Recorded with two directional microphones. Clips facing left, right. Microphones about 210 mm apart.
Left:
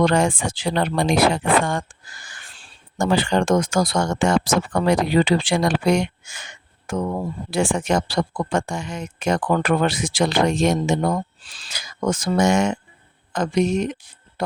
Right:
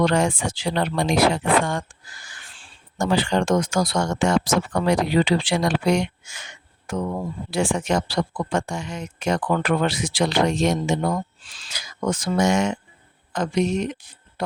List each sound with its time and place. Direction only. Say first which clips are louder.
0.0 s speech: left 2 dB; 50° left (ahead or behind)
3.0 s speech: left 2 dB; 50° left (ahead or behind)